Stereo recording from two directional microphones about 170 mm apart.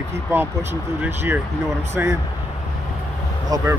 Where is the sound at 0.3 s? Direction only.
15° right (ahead or behind).